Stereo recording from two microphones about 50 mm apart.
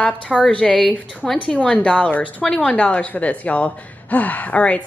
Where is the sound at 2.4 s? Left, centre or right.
Centre.